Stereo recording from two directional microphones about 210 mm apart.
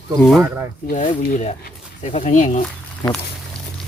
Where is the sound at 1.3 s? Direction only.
35° left (ahead or behind).